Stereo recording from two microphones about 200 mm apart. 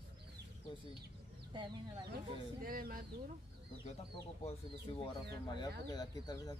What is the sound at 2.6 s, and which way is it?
Speech, 45° right (ahead or behind).